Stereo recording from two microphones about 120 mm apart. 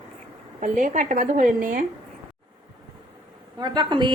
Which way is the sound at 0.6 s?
90° right.